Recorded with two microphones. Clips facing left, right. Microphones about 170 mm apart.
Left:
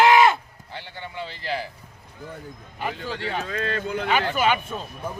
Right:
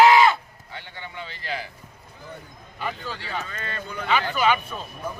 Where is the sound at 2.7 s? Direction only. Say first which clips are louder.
Left 2 dB; 50° left (ahead or behind).